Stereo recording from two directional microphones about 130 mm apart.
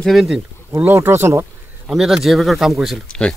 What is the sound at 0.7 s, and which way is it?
Speech, 20° right (ahead or behind).